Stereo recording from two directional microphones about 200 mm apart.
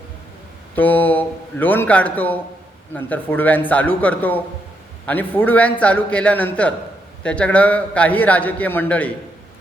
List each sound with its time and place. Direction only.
0.8 s a man's voice: 10° left (ahead or behind)